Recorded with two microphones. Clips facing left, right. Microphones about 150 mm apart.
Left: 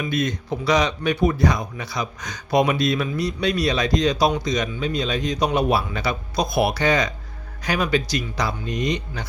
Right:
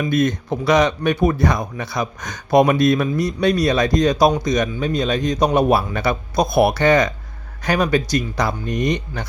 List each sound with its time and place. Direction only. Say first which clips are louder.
0.0 s speech: right 6 dB; 50° right (ahead or behind)